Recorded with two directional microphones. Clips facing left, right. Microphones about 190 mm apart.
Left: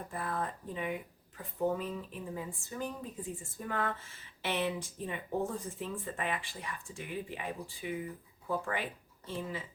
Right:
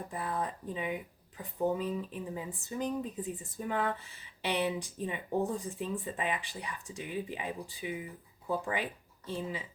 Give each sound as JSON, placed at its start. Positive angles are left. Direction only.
{"t": 0.1, "sound": "speech", "side_deg": -15}